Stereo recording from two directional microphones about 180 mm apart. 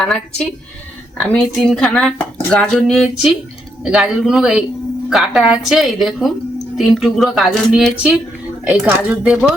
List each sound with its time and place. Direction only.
0.0 s speech: 5° left (ahead or behind)